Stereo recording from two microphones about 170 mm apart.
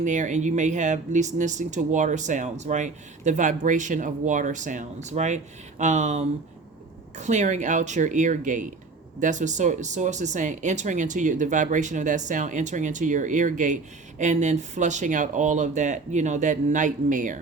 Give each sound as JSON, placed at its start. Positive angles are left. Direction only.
{"t": 0.0, "sound": "speech", "side_deg": -45}